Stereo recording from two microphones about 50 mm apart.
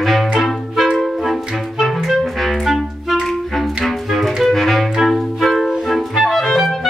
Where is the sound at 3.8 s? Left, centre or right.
Centre.